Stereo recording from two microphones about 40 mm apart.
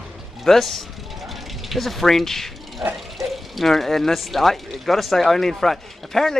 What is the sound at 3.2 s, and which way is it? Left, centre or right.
A man's voice, centre.